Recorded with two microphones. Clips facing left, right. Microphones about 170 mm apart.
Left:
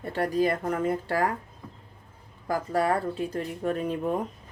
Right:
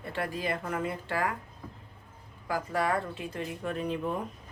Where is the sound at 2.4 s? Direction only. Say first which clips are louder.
Left 4 dB; 40° left (ahead or behind).